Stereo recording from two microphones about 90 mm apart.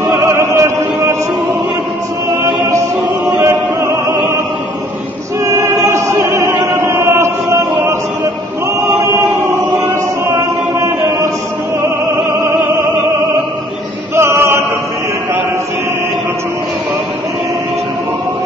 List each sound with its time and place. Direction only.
0.3 s chant: 35° right (ahead or behind)
3.3 s music: 30° right (ahead or behind)
5.4 s choir: 30° right (ahead or behind)
6.3 s chant: 30° right (ahead or behind)
9.0 s chant: 30° right (ahead or behind)
12.3 s music: 30° right (ahead or behind)
14.1 s choir: 30° right (ahead or behind)